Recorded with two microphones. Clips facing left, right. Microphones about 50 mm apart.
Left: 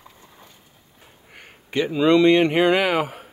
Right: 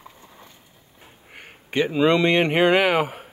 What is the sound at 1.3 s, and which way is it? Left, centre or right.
Speech, right.